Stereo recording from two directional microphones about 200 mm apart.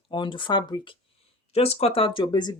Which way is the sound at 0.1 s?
25° left (ahead or behind).